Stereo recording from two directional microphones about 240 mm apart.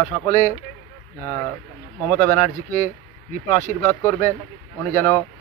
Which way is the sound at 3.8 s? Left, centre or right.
Centre.